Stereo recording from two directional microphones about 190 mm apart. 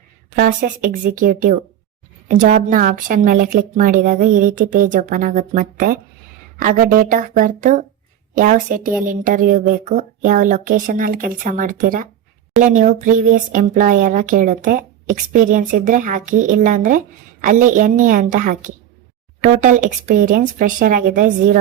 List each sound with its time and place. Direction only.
0.3 s speech: 45° right (ahead or behind)